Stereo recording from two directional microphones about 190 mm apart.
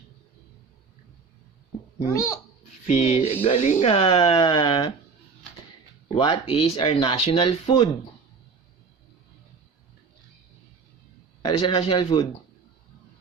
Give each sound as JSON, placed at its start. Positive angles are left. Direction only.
{"t": 2.0, "sound": "a child's voice", "side_deg": 15}
{"t": 2.8, "sound": "speech", "side_deg": 40}
{"t": 6.1, "sound": "speech", "side_deg": 25}
{"t": 11.4, "sound": "speech", "side_deg": 25}